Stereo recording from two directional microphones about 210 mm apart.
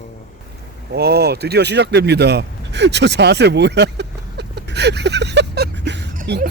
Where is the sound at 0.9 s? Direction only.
50° right (ahead or behind).